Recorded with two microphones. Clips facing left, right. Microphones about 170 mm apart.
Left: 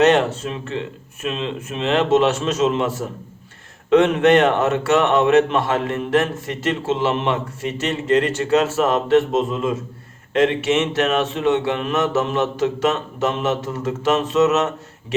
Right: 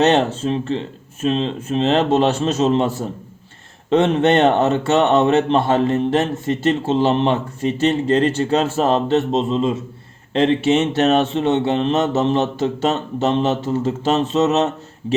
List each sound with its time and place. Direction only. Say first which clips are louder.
0.0 s speech: even; 30° right (ahead or behind)